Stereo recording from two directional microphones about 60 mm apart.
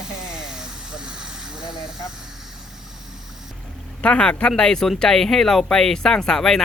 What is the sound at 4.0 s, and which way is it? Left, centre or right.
Speech, centre.